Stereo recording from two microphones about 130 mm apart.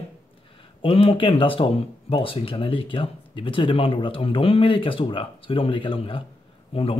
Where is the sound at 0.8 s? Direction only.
45° left (ahead or behind).